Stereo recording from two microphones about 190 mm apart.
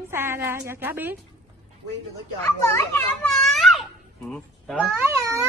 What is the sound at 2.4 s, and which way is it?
Speech, 15° left (ahead or behind).